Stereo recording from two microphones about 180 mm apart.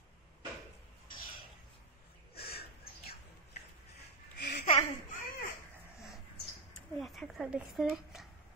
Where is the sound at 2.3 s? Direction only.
60° left (ahead or behind).